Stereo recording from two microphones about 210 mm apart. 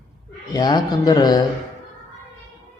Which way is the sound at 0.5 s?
20° left (ahead or behind).